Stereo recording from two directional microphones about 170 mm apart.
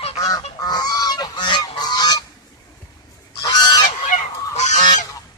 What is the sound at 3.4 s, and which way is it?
Goose, 20° left (ahead or behind).